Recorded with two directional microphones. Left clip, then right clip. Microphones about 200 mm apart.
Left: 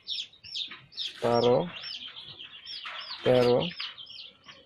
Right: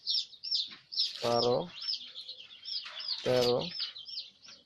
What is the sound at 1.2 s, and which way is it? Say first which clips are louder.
Speech: left 6 dB; 15° right (ahead or behind).